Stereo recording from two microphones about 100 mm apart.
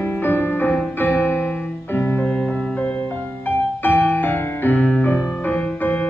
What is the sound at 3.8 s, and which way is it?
Music, 20° left (ahead or behind).